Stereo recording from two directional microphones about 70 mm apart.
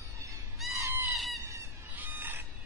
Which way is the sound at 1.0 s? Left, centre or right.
Centre.